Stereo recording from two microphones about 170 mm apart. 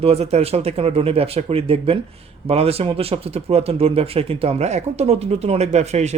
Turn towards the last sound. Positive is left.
turn(degrees=-40)  # may be behind; listen again after turning